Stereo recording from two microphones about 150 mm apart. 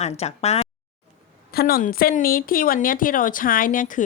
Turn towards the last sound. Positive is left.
turn(degrees=60)  # may be behind; listen again after turning